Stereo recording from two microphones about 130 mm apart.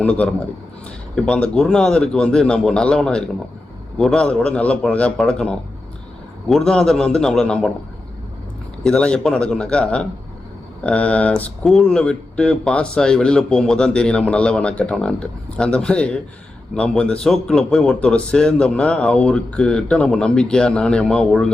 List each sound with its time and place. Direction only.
0.0 s a man's voice: 10° left (ahead or behind)
8.8 s speech: 5° left (ahead or behind)